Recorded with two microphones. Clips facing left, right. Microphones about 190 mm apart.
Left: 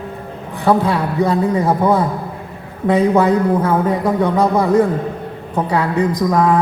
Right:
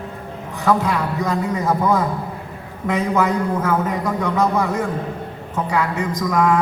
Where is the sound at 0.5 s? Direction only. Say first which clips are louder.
Left 4 dB; 30° left (ahead or behind).